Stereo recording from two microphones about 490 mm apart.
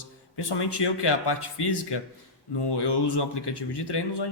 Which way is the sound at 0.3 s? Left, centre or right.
Left.